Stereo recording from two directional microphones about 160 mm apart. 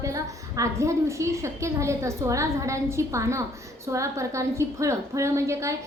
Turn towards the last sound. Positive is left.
turn(degrees=-20)  # may be behind; listen again after turning